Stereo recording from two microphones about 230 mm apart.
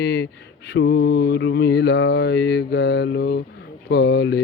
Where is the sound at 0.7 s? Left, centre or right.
Left.